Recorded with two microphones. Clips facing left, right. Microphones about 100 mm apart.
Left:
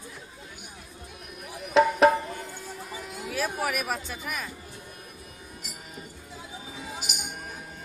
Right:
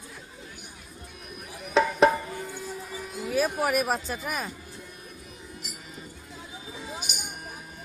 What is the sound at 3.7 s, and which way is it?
Speech, 35° right (ahead or behind).